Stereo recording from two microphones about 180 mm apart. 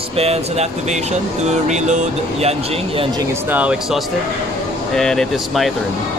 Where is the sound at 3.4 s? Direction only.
10° right (ahead or behind).